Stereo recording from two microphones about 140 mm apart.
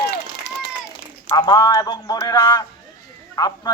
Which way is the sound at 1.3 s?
30° left (ahead or behind).